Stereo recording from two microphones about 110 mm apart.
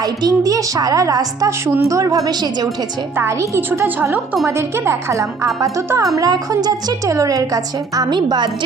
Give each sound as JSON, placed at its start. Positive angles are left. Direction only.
{"t": 0.0, "sound": "a woman's voice", "side_deg": -35}
{"t": 3.2, "sound": "a woman's voice", "side_deg": -20}